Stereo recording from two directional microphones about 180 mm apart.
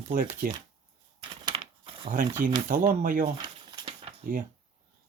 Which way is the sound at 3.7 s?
25° right (ahead or behind).